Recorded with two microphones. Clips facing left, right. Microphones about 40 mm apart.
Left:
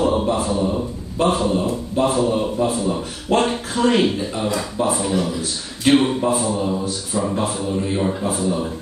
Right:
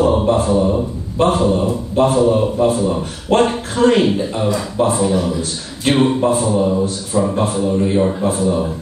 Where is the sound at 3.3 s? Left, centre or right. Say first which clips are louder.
Right 4 dB; right.